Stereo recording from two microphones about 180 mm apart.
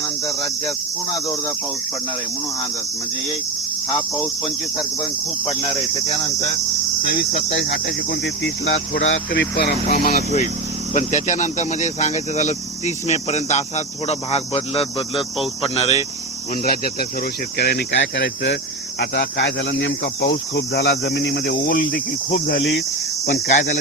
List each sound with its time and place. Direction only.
1.1 s cricket: 20° left (ahead or behind)
4.2 s cricket: centre (ahead or behind)
8.2 s cricket: 80° left; by 10.2 s 55° left (ahead or behind)
10.9 s speech: 40° left (ahead or behind)
16.6 s speech: 55° left (ahead or behind); by 18.5 s 75° left (ahead or behind)
18.9 s cricket: 65° left (ahead or behind)
23.2 s speech: 40° left (ahead or behind)